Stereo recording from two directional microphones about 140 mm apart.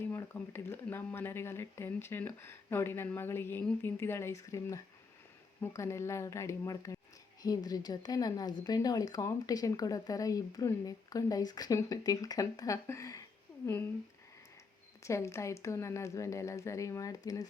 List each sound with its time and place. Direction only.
0.0 s speech: 15° left (ahead or behind)
15.0 s speech: 20° left (ahead or behind)